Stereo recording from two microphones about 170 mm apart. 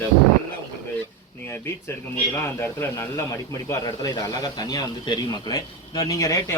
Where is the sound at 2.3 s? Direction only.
15° left (ahead or behind).